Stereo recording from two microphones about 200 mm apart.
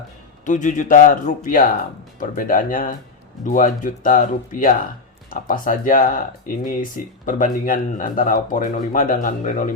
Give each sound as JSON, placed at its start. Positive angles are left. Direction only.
{"t": 0.4, "sound": "speech", "side_deg": 40}